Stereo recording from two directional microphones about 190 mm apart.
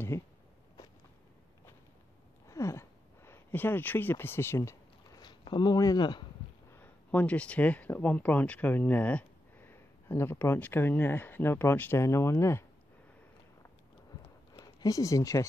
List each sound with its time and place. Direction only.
2.4 s a sound: 15° left (ahead or behind)
6.7 s speech: 10° left (ahead or behind)
14.6 s speech: 20° left (ahead or behind)